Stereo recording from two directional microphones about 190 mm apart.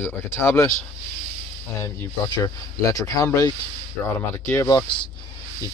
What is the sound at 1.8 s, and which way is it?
Speech, 15° left (ahead or behind).